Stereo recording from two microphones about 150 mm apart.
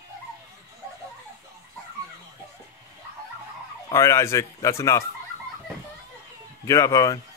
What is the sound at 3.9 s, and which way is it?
Speech, 20° left (ahead or behind).